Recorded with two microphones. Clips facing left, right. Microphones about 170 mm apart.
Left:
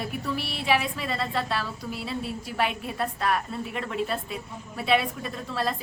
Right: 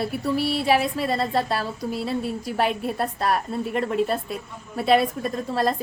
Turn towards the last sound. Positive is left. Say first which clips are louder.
# right 6 dB
turn(degrees=-40)  # may be behind; listen again after turning